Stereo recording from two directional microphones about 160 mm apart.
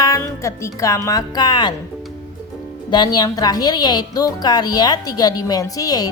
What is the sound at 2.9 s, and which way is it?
A woman's voice, 25° left (ahead or behind).